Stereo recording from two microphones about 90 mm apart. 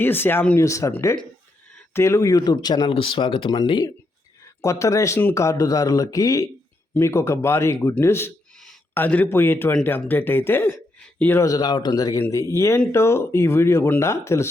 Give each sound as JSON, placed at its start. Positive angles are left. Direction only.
{"t": 0.0, "sound": "speech", "side_deg": 25}
{"t": 0.6, "sound": "speech", "side_deg": 35}
{"t": 2.4, "sound": "speech", "side_deg": 50}
{"t": 2.9, "sound": "speech", "side_deg": 80}
{"t": 4.4, "sound": "speech", "side_deg": 35}
{"t": 11.4, "sound": "speech", "side_deg": 50}
{"t": 12.3, "sound": "speech", "side_deg": 35}